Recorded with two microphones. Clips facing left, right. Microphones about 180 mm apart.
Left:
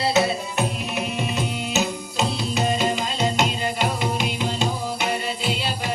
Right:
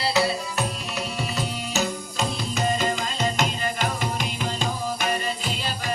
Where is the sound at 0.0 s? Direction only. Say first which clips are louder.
Left 3 dB; 25° left (ahead or behind).